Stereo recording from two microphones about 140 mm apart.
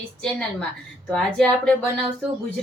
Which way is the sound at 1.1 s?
5° left (ahead or behind).